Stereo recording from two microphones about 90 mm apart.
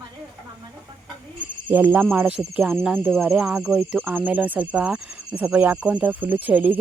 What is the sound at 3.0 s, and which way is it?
Insect, centre (ahead or behind).